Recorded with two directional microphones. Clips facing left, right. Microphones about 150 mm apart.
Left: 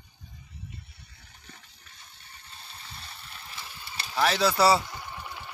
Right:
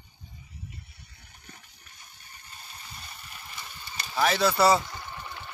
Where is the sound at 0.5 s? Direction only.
5° right (ahead or behind).